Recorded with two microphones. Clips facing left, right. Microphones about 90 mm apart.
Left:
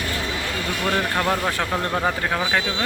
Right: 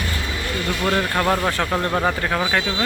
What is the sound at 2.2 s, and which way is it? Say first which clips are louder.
Speech: right 1 dB; 10° left (ahead or behind).